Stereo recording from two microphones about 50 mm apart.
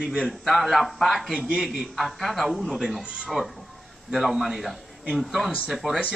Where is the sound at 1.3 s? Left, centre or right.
Right.